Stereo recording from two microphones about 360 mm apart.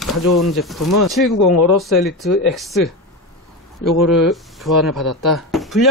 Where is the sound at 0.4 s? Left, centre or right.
Centre.